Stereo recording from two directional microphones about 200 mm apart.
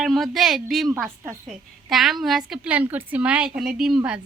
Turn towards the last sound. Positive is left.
turn(degrees=-5)  # may be behind; listen again after turning